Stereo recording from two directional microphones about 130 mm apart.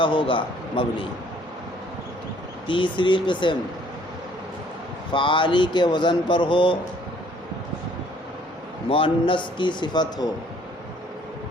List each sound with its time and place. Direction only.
0.0 s speech: 40° left (ahead or behind)
2.6 s speech: 40° left (ahead or behind)
5.1 s speech: 40° left (ahead or behind)
8.9 s speech: 45° left (ahead or behind)